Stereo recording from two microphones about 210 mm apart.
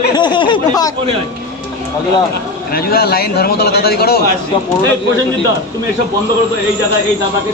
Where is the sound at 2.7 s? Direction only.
45° left (ahead or behind).